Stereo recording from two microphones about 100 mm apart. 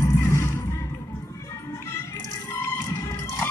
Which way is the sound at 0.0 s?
30° left (ahead or behind).